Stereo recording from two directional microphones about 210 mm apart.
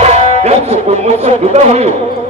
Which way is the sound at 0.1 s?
30° right (ahead or behind).